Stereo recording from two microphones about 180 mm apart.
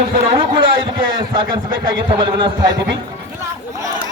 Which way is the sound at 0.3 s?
30° right (ahead or behind).